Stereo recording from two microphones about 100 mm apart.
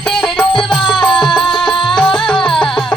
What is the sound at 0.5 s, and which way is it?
Music, 50° left (ahead or behind).